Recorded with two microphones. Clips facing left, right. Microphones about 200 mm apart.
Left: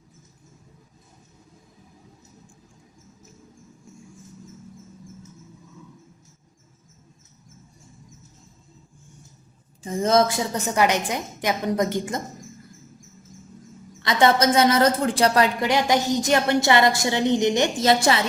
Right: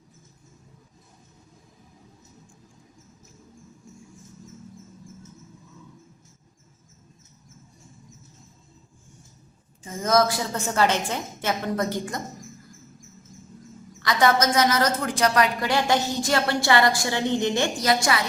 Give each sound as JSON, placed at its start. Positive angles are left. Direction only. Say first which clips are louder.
{"t": 9.8, "sound": "a woman's voice", "louder": "left 2 dB", "side_deg": 30}
{"t": 14.0, "sound": "a woman's voice", "louder": "left 2 dB", "side_deg": 25}